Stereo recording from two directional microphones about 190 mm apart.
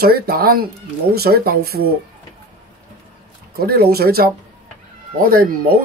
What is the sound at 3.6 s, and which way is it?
Speech, 55° right (ahead or behind).